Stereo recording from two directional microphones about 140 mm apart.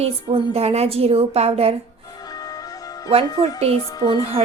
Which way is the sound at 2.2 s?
25° left (ahead or behind).